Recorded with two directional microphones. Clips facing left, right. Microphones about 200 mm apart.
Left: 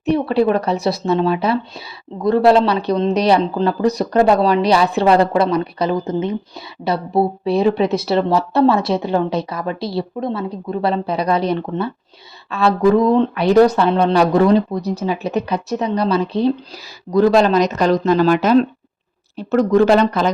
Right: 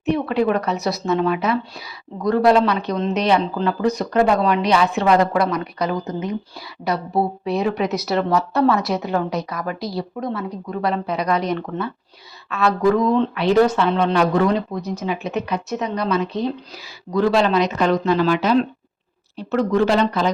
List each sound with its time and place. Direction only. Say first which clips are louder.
0.0 s speech: left 3 dB; 35° left (ahead or behind)
13.3 s speech: left 4 dB; 40° left (ahead or behind)